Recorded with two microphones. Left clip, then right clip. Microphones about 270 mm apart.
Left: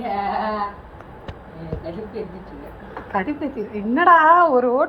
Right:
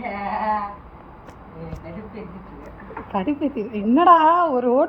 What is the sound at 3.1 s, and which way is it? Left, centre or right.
A woman's voice, centre.